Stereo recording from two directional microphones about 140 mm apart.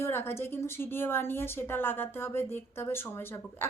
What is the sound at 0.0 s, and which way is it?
A woman's voice, 15° left (ahead or behind).